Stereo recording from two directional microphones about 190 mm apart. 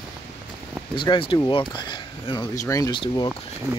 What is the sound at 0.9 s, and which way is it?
Speech, 25° left (ahead or behind).